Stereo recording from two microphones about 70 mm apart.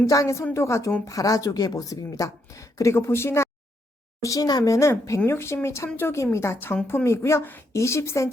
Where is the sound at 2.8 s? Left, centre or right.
Left.